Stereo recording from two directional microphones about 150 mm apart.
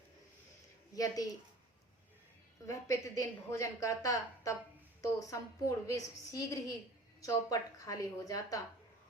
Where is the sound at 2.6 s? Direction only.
20° left (ahead or behind).